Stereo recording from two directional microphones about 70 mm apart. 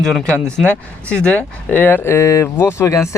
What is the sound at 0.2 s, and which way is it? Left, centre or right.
Speech, centre.